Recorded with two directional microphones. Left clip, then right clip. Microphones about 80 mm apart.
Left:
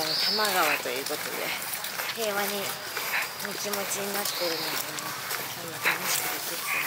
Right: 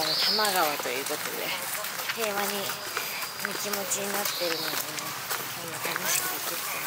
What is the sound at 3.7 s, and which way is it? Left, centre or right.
Speech, centre.